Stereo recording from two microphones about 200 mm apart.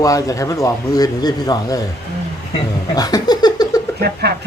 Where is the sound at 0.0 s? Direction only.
15° left (ahead or behind).